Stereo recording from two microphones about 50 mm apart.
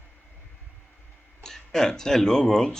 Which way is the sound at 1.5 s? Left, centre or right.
Centre.